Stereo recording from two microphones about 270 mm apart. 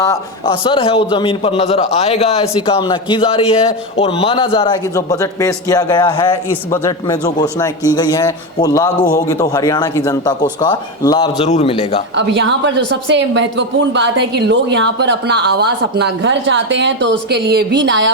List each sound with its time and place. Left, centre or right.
0.0 s a man's voice: centre
12.1 s a woman's voice: right